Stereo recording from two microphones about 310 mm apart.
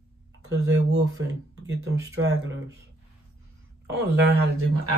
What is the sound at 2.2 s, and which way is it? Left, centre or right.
Speech, right.